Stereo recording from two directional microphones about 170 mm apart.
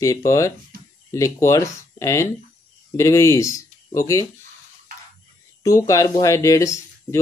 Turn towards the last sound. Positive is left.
turn(degrees=20)  # may be behind; listen again after turning